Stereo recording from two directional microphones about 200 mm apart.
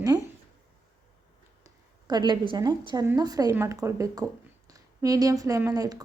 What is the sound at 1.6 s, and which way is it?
A woman's voice, 20° right (ahead or behind).